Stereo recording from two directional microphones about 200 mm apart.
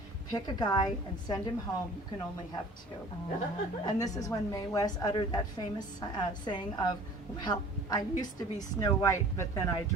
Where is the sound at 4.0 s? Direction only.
15° left (ahead or behind).